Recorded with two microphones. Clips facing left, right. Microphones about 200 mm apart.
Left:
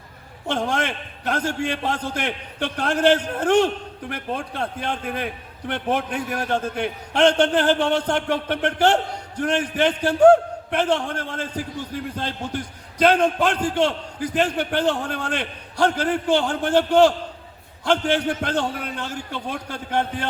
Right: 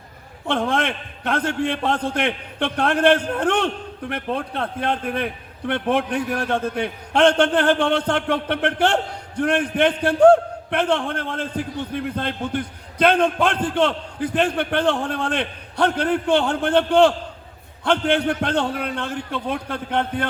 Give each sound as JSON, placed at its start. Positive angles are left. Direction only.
{"t": 0.4, "sound": "a man's voice", "side_deg": -60}